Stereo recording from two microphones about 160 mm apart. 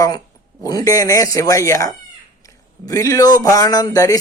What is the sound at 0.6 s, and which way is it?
Speech, 20° left (ahead or behind).